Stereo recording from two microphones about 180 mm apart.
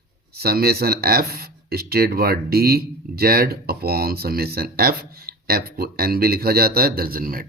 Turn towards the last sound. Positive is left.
turn(degrees=-55)  # may be behind; listen again after turning